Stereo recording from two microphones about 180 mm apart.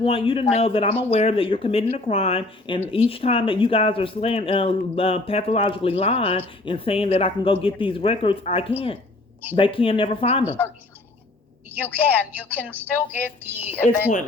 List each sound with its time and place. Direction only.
0.0 s speech: 30° left (ahead or behind)
12.0 s a woman's voice: 10° left (ahead or behind)
12.5 s music: 10° right (ahead or behind)